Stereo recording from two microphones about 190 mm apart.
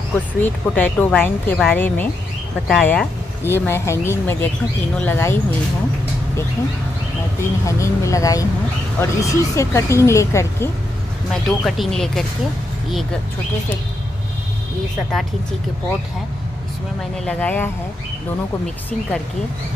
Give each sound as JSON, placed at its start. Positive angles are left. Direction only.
{"t": 0.4, "sound": "speech", "side_deg": 10}
{"t": 7.6, "sound": "speech", "side_deg": 15}
{"t": 11.4, "sound": "speech", "side_deg": 0}
{"t": 17.2, "sound": "speech", "side_deg": 5}